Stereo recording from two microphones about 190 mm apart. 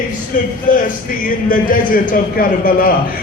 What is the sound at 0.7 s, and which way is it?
A man's voice, 45° left (ahead or behind).